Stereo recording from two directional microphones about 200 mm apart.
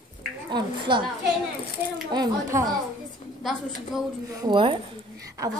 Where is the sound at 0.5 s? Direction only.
25° right (ahead or behind).